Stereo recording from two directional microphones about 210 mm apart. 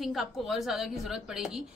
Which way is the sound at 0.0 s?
Centre (ahead or behind).